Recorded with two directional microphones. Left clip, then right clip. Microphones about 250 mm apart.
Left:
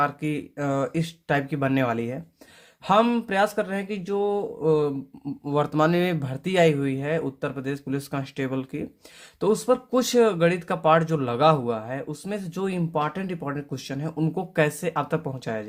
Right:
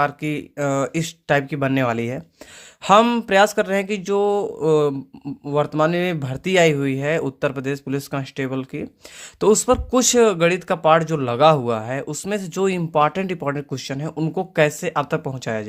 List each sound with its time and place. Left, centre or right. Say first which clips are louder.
0.0 s speech: right 3 dB; centre
5.2 s speech: right 4 dB; centre